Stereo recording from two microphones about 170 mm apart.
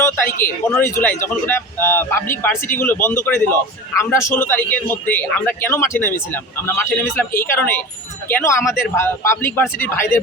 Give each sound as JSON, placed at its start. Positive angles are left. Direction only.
{"t": 0.3, "sound": "speech", "side_deg": 55}
{"t": 0.7, "sound": "a man's voice", "side_deg": 15}